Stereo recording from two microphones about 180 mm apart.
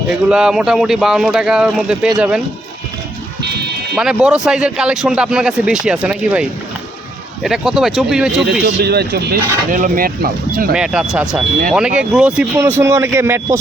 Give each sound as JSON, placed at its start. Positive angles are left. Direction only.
{"t": 0.3, "sound": "speech", "side_deg": -5}
{"t": 3.9, "sound": "speech", "side_deg": -5}
{"t": 8.8, "sound": "speech", "side_deg": -65}
{"t": 10.7, "sound": "speech", "side_deg": -5}